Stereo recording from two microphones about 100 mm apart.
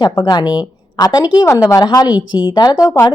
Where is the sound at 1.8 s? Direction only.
40° left (ahead or behind).